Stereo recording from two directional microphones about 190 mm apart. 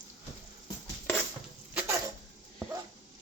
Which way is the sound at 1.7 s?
10° right (ahead or behind).